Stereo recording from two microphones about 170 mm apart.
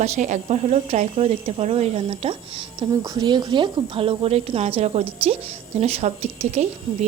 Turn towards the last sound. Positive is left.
turn(degrees=-40)  # may be behind; listen again after turning